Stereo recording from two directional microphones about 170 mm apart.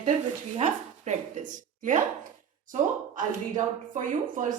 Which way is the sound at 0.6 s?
45° right (ahead or behind).